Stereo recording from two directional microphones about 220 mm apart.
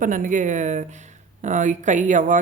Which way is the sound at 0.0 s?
35° right (ahead or behind).